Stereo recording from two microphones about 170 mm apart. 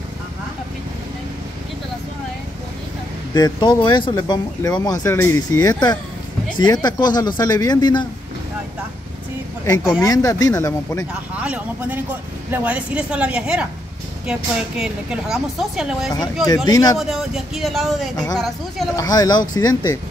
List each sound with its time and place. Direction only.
3.3 s speech: 25° left (ahead or behind)
10.0 s speech: 20° left (ahead or behind)
11.3 s speech: 10° right (ahead or behind)
14.8 s speech: 5° right (ahead or behind)
16.4 s speech: 20° left (ahead or behind)
17.0 s speech: centre (ahead or behind)
18.1 s speech: 20° left (ahead or behind)